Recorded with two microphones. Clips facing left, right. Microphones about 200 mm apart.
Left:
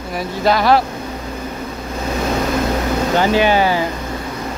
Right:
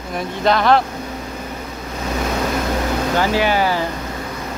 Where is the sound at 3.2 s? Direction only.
20° left (ahead or behind).